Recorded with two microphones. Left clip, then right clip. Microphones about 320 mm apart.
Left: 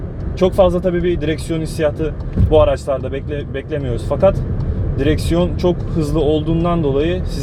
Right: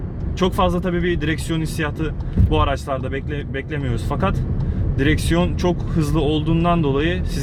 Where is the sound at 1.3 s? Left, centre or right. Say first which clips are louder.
Left 3 dB; right.